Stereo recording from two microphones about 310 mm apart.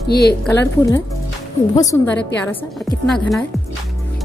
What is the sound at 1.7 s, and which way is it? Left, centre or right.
A woman's voice, centre.